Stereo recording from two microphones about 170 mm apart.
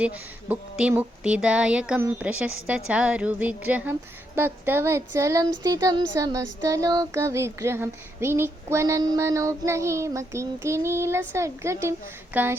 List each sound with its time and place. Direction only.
0.0 s speech: 10° right (ahead or behind)